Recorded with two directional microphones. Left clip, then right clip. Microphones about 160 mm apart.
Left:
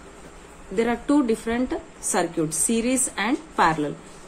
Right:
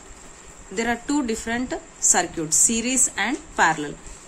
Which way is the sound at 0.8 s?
15° right (ahead or behind).